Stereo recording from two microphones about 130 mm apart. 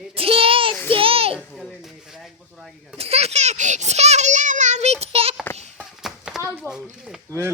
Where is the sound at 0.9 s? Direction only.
45° right (ahead or behind).